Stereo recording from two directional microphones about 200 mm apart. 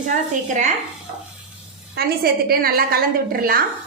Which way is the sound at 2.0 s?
50° right (ahead or behind).